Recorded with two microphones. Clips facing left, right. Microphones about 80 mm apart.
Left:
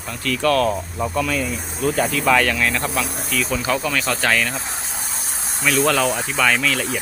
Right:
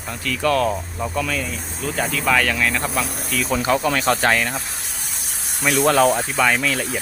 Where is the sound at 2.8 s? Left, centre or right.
Right.